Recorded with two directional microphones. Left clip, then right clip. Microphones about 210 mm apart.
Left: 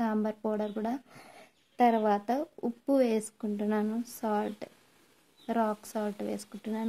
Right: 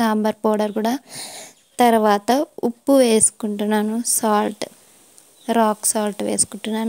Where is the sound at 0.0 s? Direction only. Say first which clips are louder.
Right 13 dB; 40° right (ahead or behind).